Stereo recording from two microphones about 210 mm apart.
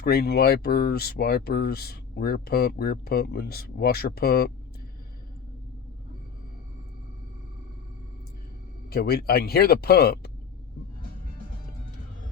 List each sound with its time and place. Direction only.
0.0 s speech: 50° left (ahead or behind)
8.9 s speech: 45° left (ahead or behind)